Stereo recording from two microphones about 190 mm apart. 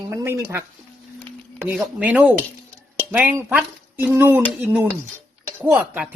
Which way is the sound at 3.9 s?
10° right (ahead or behind).